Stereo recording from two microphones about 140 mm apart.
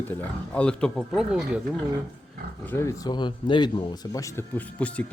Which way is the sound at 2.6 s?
20° left (ahead or behind).